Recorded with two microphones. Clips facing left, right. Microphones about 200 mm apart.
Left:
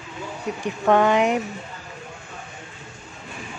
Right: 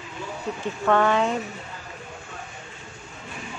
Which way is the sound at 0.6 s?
15° left (ahead or behind).